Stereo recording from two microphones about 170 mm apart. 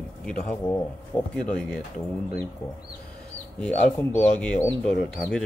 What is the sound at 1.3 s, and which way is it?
Speech, 5° left (ahead or behind).